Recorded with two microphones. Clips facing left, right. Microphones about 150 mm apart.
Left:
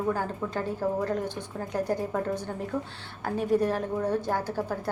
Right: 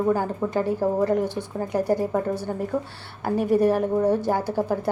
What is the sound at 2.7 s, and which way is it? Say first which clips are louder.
Speech: right 4 dB; 30° right (ahead or behind).